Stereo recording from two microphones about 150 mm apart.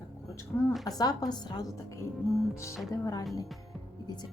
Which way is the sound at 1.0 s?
25° left (ahead or behind).